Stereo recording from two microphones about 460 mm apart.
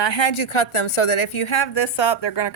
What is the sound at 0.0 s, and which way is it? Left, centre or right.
A woman's voice, left.